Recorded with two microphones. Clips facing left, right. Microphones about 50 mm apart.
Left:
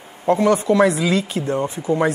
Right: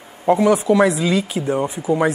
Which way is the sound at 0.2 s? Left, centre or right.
Centre.